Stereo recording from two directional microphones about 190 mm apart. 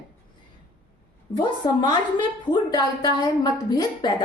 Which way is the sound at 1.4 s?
25° left (ahead or behind).